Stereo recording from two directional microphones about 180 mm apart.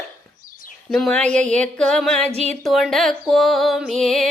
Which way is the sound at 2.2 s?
40° right (ahead or behind).